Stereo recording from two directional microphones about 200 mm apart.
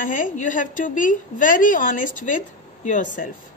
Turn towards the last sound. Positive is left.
turn(degrees=40)  # may be behind; listen again after turning